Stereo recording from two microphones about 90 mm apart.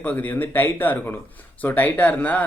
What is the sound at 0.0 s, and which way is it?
Speech, 20° left (ahead or behind).